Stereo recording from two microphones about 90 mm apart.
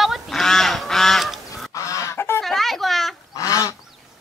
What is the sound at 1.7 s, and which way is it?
Goose, 35° left (ahead or behind).